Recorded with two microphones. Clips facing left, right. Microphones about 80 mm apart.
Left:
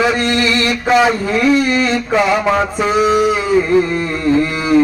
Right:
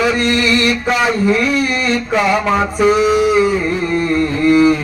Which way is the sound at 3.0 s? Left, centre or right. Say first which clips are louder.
Right 1 dB; left.